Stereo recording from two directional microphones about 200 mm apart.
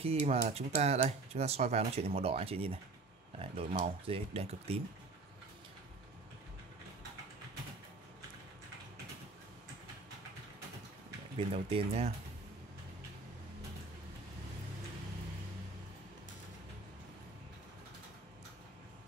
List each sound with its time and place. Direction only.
0.0 s speech: 30° right (ahead or behind)
11.3 s speech: 25° right (ahead or behind)